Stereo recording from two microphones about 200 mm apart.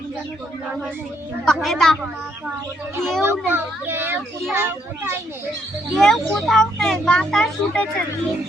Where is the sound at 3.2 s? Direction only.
10° right (ahead or behind).